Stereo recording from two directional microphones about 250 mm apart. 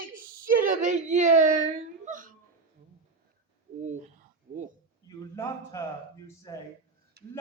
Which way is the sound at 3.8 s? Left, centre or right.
Right.